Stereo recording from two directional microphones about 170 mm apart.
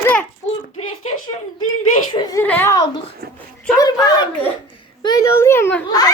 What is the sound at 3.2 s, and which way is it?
Speech, 65° right (ahead or behind).